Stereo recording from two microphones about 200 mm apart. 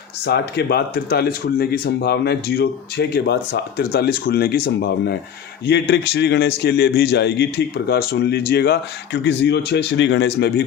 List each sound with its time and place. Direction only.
0.3 s a man's voice: 55° left (ahead or behind)